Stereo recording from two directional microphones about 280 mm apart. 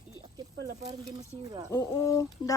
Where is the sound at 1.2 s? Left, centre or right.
Centre.